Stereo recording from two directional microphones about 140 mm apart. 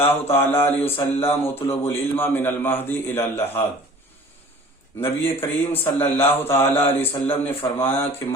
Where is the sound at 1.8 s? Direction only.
15° left (ahead or behind).